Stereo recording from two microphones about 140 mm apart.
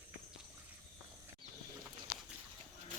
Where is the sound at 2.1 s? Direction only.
90° left.